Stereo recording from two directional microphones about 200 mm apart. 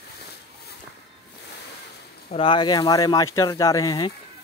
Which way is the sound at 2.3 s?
25° left (ahead or behind).